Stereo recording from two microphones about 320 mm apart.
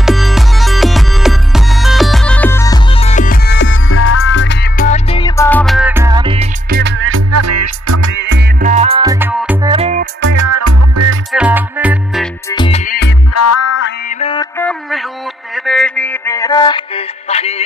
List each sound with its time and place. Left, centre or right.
0.0 s music: centre
6.8 s music: right
8.3 s music: right; by 9.7 s centre
9.7 s music: centre
10.3 s music: right
11.3 s music: centre
12.4 s music: centre
13.3 s music: left
14.0 s music: centre